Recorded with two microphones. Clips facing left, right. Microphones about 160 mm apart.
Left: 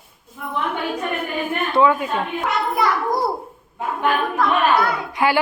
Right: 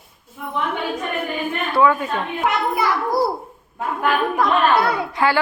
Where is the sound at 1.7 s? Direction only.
15° left (ahead or behind).